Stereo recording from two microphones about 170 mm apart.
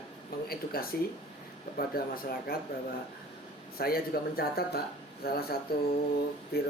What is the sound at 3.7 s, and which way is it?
Speech, 60° left (ahead or behind).